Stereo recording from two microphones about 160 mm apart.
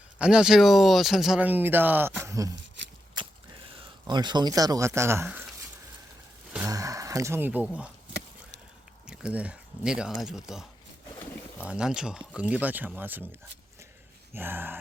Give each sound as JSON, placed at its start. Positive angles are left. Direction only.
{"t": 0.2, "sound": "speech", "side_deg": -5}
{"t": 4.0, "sound": "speech", "side_deg": -25}
{"t": 6.7, "sound": "a sound", "side_deg": -20}
{"t": 9.0, "sound": "speech", "side_deg": -5}
{"t": 14.3, "sound": "speech", "side_deg": -15}